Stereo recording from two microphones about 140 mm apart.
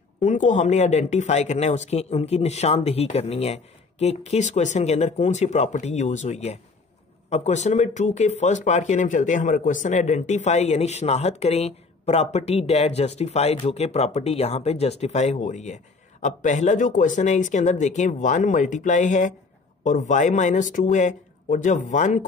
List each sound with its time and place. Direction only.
0.2 s speech: 60° left (ahead or behind)